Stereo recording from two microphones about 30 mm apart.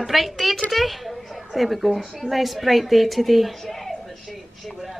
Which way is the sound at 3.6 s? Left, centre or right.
Centre.